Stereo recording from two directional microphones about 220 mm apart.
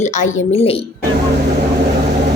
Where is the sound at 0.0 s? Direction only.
30° left (ahead or behind).